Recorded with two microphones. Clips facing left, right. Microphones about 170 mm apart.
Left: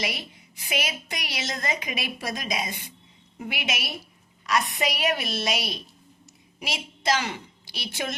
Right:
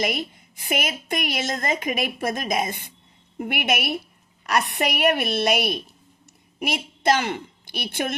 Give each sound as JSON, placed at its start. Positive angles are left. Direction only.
{"t": 0.0, "sound": "a woman's voice", "side_deg": -50}